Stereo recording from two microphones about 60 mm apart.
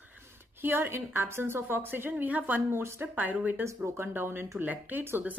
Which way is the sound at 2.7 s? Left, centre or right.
Right.